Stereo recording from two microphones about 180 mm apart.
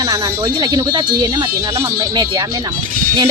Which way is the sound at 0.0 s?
20° right (ahead or behind).